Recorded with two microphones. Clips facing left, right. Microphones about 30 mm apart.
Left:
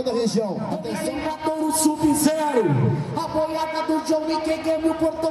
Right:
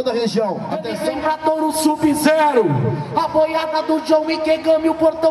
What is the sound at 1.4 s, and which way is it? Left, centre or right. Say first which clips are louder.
A man's voice: right 2 dB; right.